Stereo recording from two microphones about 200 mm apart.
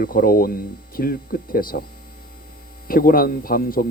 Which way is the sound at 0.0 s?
45° left (ahead or behind).